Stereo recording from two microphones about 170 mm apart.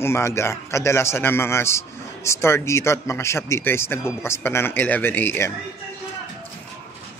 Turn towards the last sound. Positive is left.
turn(degrees=15)  # may be behind; listen again after turning